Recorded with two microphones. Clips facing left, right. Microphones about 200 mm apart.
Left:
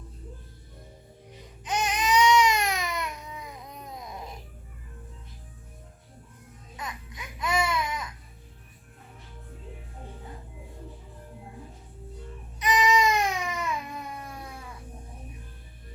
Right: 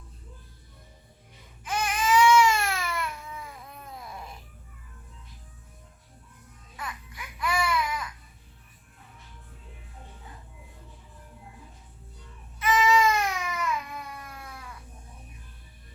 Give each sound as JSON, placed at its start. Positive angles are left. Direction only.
{"t": 1.6, "sound": "baby cry", "side_deg": 20}
{"t": 6.7, "sound": "baby cry", "side_deg": 20}
{"t": 12.5, "sound": "baby cry", "side_deg": 15}